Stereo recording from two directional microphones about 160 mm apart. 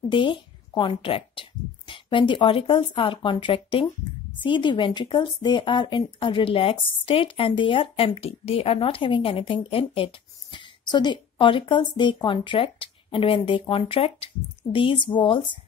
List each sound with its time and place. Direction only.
0.1 s a woman's voice: 30° left (ahead or behind)